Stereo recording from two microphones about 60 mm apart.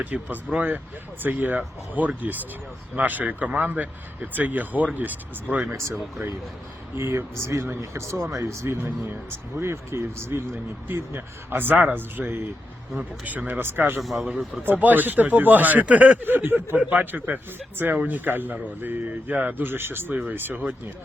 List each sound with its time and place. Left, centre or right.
0.0 s speech: right
6.9 s speech: right
7.8 s speech: right
14.0 s speech: centre
14.5 s speech: right